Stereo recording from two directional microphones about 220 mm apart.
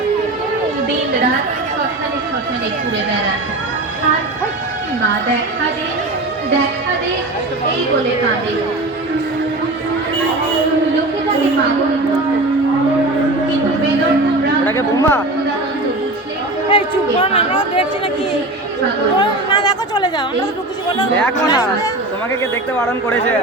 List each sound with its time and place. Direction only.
14.6 s a woman's voice: 10° left (ahead or behind)
16.6 s a woman's voice: 25° left (ahead or behind)
19.2 s speech: 20° left (ahead or behind)
21.4 s speech: 15° left (ahead or behind)
22.8 s speech: 5° left (ahead or behind)